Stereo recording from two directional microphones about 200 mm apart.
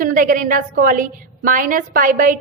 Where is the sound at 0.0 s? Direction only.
45° right (ahead or behind).